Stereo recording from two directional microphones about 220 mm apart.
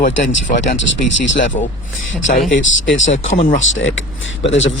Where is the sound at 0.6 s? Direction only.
55° left (ahead or behind).